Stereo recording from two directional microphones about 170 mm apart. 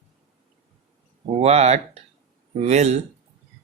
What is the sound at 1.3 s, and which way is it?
Speech, 40° right (ahead or behind).